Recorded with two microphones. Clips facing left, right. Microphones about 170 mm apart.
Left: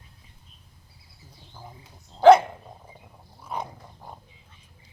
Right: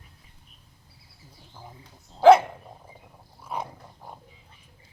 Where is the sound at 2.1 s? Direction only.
5° right (ahead or behind).